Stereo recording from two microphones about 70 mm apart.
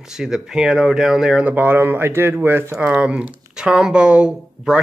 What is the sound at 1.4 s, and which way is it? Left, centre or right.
Speech, right.